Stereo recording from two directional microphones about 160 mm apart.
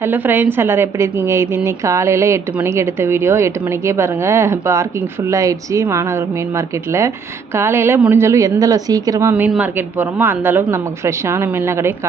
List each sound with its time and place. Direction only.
0.0 s a woman's voice: 10° right (ahead or behind)
9.3 s a woman's voice: 10° right (ahead or behind)